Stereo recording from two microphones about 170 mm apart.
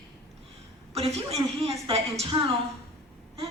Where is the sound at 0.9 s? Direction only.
35° right (ahead or behind).